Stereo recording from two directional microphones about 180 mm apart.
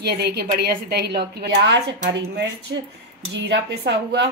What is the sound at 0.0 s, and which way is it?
A woman's voice, 60° right (ahead or behind).